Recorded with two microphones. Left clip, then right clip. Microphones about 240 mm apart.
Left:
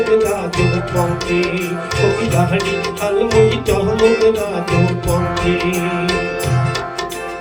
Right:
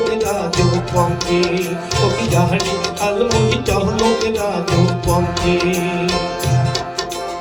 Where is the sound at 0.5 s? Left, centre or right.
Right.